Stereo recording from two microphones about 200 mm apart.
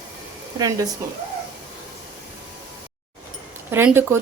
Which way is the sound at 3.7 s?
10° right (ahead or behind).